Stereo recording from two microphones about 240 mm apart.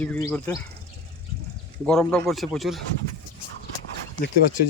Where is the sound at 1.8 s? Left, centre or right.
Centre.